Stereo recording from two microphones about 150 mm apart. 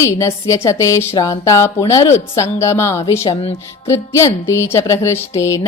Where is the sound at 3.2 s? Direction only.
40° left (ahead or behind).